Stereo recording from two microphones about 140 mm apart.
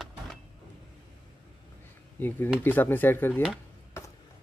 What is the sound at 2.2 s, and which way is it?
Speech, 15° left (ahead or behind).